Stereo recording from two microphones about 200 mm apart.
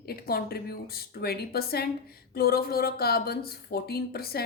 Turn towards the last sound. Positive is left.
turn(degrees=50)  # may be behind; listen again after turning